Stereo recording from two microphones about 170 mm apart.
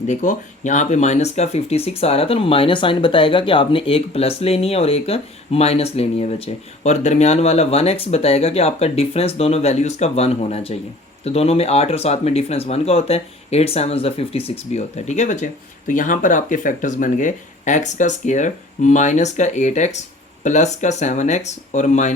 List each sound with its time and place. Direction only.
0.1 s speech: 45° left (ahead or behind)